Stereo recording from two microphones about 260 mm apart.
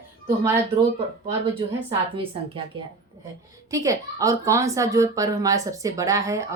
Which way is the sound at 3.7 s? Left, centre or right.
Centre.